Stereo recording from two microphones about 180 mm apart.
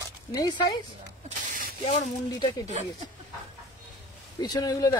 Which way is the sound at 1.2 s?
50° right (ahead or behind).